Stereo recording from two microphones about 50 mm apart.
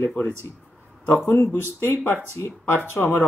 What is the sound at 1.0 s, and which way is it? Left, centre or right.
Speech, left.